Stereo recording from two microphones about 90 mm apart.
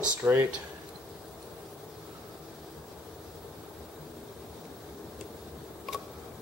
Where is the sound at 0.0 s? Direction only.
20° right (ahead or behind).